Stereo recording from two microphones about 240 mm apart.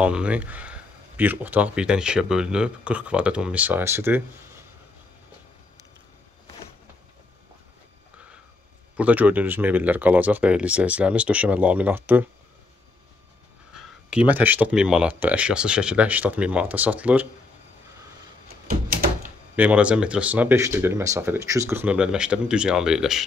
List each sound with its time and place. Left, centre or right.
0.0 s speech: centre
8.9 s speech: centre
13.7 s speech: centre
18.7 s a sound: right
19.5 s speech: centre